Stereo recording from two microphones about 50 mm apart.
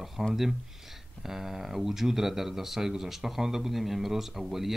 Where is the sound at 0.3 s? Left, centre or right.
Centre.